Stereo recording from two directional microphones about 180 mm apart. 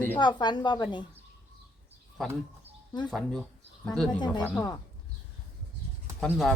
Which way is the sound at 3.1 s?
Centre (ahead or behind).